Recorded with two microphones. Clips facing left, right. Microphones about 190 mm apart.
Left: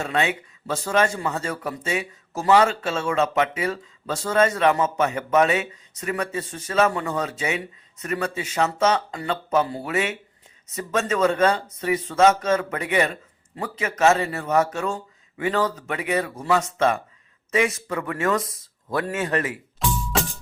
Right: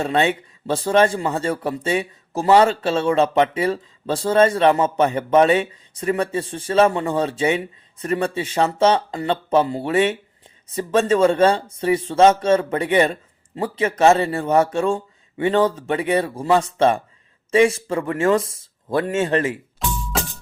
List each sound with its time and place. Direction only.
0.0 s a man's voice: 30° right (ahead or behind)